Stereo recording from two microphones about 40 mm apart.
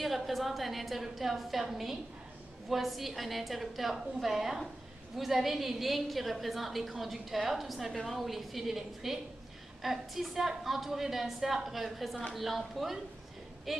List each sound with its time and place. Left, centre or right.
0.0 s a woman's voice: centre